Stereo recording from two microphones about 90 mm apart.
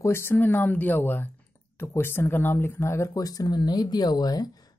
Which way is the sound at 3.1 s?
45° left (ahead or behind).